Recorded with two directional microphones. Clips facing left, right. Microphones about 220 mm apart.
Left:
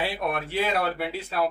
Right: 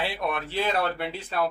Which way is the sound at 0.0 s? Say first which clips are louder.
Left 1 dB; 10° left (ahead or behind).